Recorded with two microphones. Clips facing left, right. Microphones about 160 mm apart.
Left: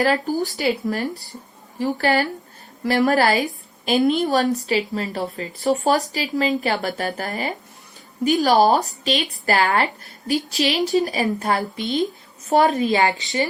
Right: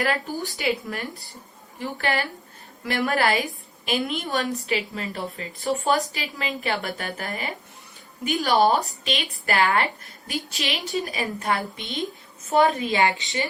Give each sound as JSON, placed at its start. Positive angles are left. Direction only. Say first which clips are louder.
{"t": 0.0, "sound": "a woman's voice", "louder": "left 6 dB", "side_deg": 40}